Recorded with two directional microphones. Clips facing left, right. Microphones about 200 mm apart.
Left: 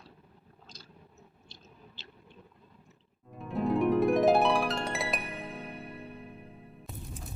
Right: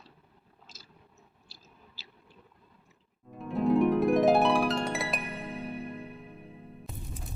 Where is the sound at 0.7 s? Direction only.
5° right (ahead or behind).